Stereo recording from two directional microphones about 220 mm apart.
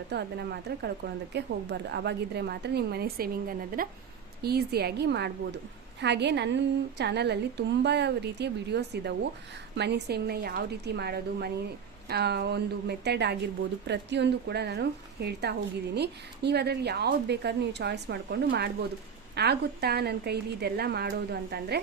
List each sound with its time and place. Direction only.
0.1 s a woman's voice: 50° right (ahead or behind)